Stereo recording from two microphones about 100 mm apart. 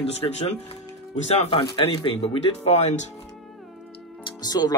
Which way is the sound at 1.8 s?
70° left (ahead or behind).